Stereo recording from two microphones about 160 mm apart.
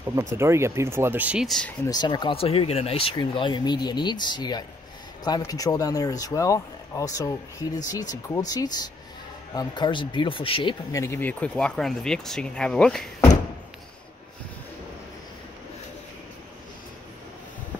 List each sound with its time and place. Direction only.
0.0 s speech: 15° right (ahead or behind); by 1.7 s centre (ahead or behind)
1.9 s speech: 25° left (ahead or behind); by 13.1 s 5° left (ahead or behind)